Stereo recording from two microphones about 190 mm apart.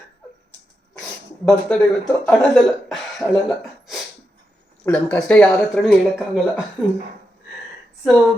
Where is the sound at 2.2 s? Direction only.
5° left (ahead or behind).